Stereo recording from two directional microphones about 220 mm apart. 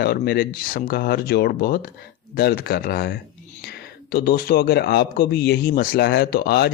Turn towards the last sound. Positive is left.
turn(degrees=45)  # may be behind; listen again after turning